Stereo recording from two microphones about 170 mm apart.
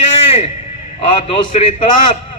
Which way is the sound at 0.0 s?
35° left (ahead or behind).